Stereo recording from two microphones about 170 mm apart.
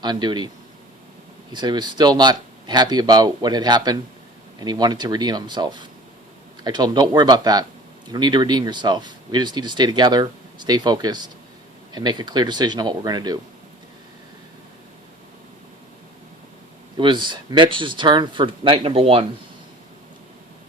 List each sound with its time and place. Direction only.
0.0 s speech: 25° right (ahead or behind)
1.5 s speech: 25° right (ahead or behind)
17.0 s speech: 25° right (ahead or behind)